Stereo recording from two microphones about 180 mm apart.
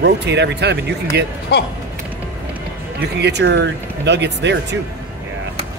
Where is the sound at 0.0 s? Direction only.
70° right (ahead or behind).